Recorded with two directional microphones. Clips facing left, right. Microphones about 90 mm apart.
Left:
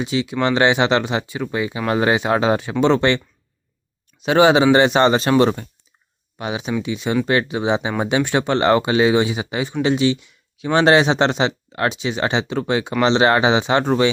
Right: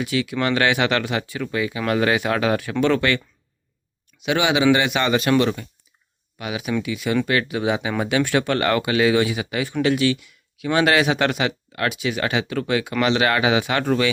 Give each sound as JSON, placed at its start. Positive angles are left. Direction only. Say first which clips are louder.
{"t": 0.0, "sound": "speech", "louder": "left 2 dB", "side_deg": 20}
{"t": 4.2, "sound": "speech", "louder": "left 6 dB", "side_deg": 35}